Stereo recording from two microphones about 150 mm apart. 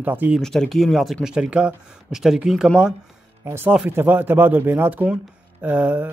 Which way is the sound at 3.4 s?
15° right (ahead or behind).